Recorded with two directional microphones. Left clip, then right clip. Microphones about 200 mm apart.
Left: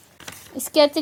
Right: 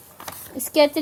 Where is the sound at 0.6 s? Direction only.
20° left (ahead or behind).